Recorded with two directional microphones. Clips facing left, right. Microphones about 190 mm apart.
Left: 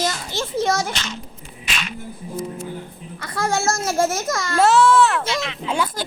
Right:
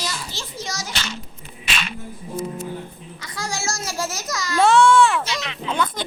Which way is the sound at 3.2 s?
55° left (ahead or behind).